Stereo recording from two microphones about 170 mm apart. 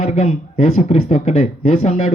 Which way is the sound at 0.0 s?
40° left (ahead or behind).